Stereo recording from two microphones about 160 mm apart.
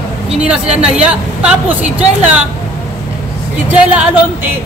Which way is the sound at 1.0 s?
5° right (ahead or behind).